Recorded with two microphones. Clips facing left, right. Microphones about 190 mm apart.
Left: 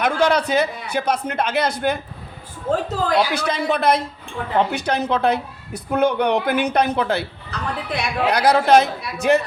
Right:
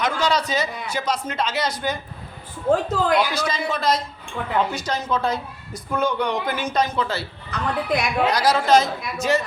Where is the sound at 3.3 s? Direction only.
60° left (ahead or behind).